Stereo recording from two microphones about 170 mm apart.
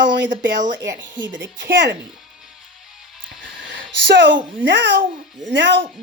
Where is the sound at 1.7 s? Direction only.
90° right.